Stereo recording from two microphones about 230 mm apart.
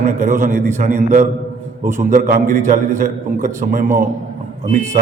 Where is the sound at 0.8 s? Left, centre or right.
Right.